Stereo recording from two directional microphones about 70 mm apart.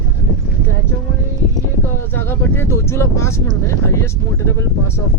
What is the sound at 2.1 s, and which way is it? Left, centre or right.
Speech, left.